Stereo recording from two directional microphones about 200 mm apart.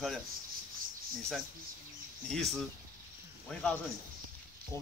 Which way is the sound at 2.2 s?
Centre (ahead or behind).